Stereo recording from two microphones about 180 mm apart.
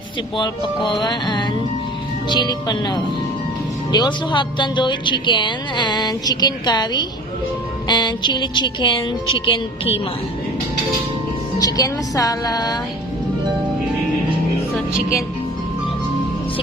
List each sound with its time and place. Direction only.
0.9 s a woman's voice: 25° left (ahead or behind)
11.6 s a woman's voice: 20° left (ahead or behind)